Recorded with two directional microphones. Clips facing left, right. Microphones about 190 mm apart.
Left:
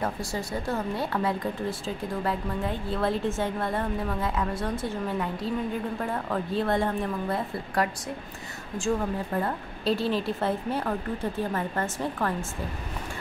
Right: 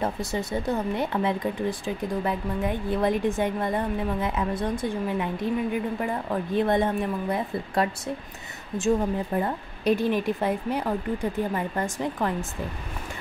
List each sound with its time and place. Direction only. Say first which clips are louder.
0.0 s speech: right 3 dB; 20° right (ahead or behind)